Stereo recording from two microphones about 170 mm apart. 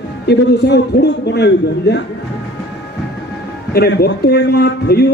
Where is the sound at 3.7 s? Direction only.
70° left (ahead or behind).